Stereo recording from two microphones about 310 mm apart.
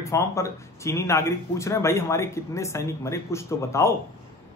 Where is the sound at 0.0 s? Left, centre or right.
Centre.